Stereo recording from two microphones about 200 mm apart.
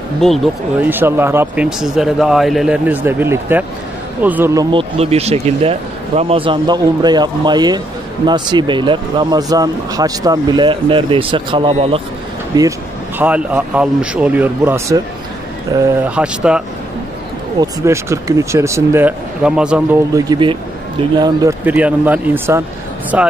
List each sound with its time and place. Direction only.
0.2 s speech: centre (ahead or behind)
0.8 s speech: 10° right (ahead or behind)
4.7 s speech: 30° right (ahead or behind)
13.2 s speech: 5° right (ahead or behind)
16.2 s speech: 5° right (ahead or behind)
20.2 s speech: 20° right (ahead or behind)
21.6 s speech: 10° right (ahead or behind)